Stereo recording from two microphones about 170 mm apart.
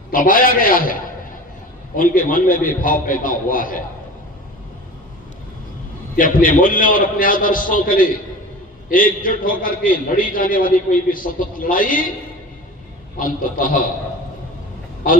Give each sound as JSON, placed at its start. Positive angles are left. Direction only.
{"t": 0.1, "sound": "a man's voice", "side_deg": 55}
{"t": 2.0, "sound": "a man's voice", "side_deg": 55}
{"t": 6.1, "sound": "a man's voice", "side_deg": 55}
{"t": 13.1, "sound": "a man's voice", "side_deg": 55}